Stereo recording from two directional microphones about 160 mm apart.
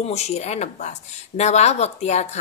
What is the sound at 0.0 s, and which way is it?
Speech, 45° left (ahead or behind).